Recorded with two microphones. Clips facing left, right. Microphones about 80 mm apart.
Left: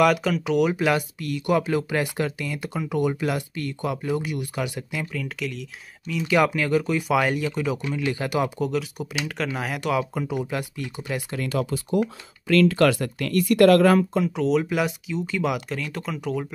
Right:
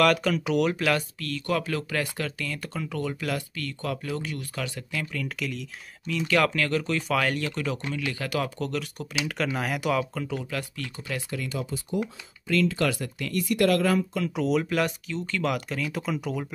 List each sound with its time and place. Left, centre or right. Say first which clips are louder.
0.0 s speech: left 2 dB; centre
5.1 s speech: left 2 dB; centre
10.1 s speech: left 4 dB; centre
11.3 s speech: left 8 dB; left
14.3 s speech: even; centre